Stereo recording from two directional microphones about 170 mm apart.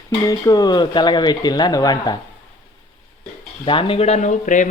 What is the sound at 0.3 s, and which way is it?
Speech, 20° left (ahead or behind).